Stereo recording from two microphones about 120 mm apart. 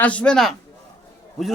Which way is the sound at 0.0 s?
10° left (ahead or behind).